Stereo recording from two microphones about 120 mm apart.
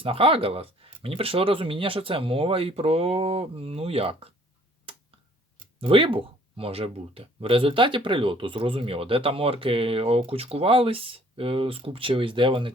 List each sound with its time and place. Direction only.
0.0 s speech: 50° right (ahead or behind)
4.9 s finger snapping: 50° right (ahead or behind)
5.8 s speech: 45° right (ahead or behind)